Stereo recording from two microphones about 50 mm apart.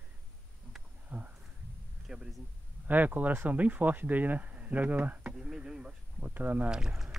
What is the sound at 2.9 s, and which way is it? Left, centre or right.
Speech, right.